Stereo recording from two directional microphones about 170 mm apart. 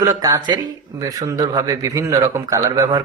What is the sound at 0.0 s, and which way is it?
A man's voice, 20° right (ahead or behind).